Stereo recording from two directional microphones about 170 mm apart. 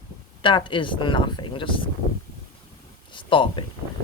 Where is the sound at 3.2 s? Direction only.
30° left (ahead or behind).